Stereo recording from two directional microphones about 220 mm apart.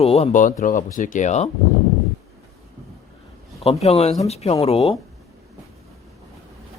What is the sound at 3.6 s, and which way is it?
Speech, 30° left (ahead or behind).